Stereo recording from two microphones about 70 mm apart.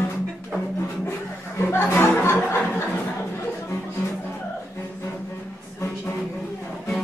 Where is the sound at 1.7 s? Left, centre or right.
Left.